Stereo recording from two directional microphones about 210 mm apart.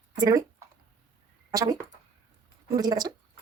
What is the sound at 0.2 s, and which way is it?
Speech, 15° right (ahead or behind).